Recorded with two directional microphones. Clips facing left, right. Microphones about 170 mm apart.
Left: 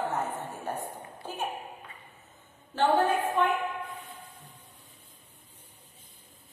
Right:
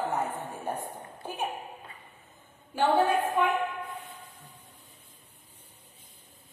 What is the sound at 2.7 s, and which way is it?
Speech, 10° right (ahead or behind).